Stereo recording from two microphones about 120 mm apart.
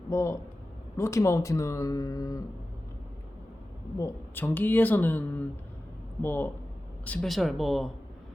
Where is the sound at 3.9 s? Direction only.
20° left (ahead or behind).